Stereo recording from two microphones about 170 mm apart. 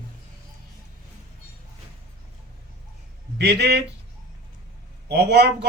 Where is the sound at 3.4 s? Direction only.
80° right.